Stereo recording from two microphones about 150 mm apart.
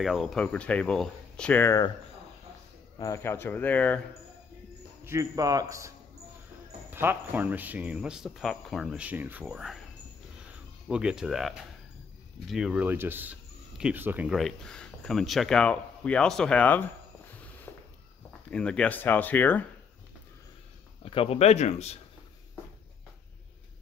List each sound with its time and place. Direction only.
0.0 s speech: centre (ahead or behind); by 1.9 s 20° left (ahead or behind)
3.0 s speech: 20° left (ahead or behind)
5.0 s a man's voice: 20° right (ahead or behind)
10.9 s speech: 5° right (ahead or behind); by 16.8 s 10° left (ahead or behind)
17.3 s a sound: 10° left (ahead or behind)
18.5 s speech: 5° left (ahead or behind)
21.0 s speech: 40° left (ahead or behind)